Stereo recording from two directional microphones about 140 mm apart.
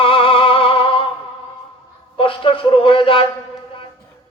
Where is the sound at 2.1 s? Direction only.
40° left (ahead or behind).